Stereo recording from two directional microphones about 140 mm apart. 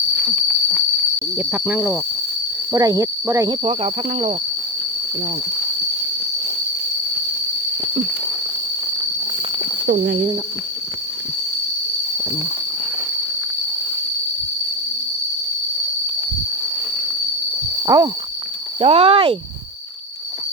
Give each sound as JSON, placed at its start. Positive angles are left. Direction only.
{"t": 0.2, "sound": "a sound", "side_deg": 0}
{"t": 1.4, "sound": "speech", "side_deg": -10}
{"t": 2.7, "sound": "cricket", "side_deg": -25}
{"t": 3.5, "sound": "speech", "side_deg": -45}
{"t": 17.8, "sound": "a sound", "side_deg": -30}
{"t": 18.8, "sound": "speech", "side_deg": -45}